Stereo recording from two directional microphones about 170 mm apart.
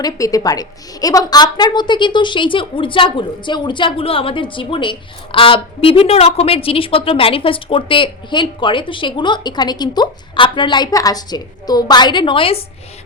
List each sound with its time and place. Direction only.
0.0 s a woman's voice: 20° left (ahead or behind)